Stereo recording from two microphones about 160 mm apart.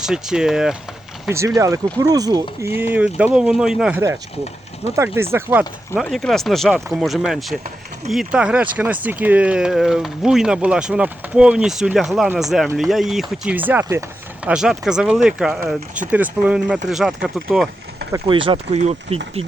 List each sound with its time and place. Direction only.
0.0 s speech: 5° right (ahead or behind)
1.3 s speech: 20° right (ahead or behind)
4.9 s speech: 15° right (ahead or behind)
6.0 s speech: centre (ahead or behind)
18.3 s speech: 30° right (ahead or behind)